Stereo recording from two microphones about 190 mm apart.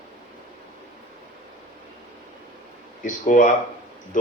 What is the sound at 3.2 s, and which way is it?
Speech, 45° left (ahead or behind).